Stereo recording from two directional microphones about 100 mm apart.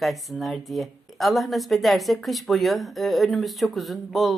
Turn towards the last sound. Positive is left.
turn(degrees=0)  # may be behind; listen again after turning